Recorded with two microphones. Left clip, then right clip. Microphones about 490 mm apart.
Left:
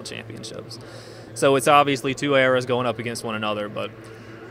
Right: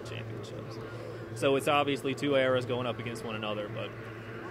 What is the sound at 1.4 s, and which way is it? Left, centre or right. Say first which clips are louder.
Speech: left 11 dB; left.